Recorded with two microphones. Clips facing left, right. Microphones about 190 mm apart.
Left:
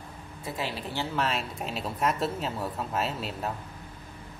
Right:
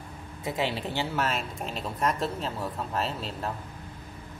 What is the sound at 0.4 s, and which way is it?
Speech, 20° right (ahead or behind).